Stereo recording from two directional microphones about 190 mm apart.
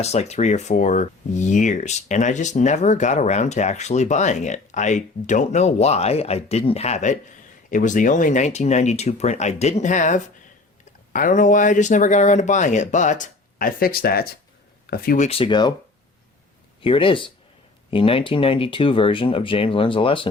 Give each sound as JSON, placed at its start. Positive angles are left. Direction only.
{"t": 0.0, "sound": "speech", "side_deg": 35}
{"t": 16.8, "sound": "speech", "side_deg": 25}